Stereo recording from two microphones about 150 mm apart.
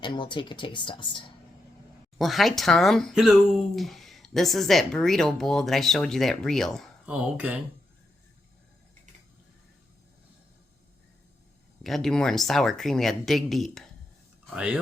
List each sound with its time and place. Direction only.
0.0 s speech: 30° left (ahead or behind)
2.1 s speech: centre (ahead or behind)
7.0 s speech: 10° right (ahead or behind)
11.8 s speech: centre (ahead or behind)